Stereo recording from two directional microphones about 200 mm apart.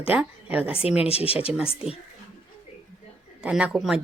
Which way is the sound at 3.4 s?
5° right (ahead or behind).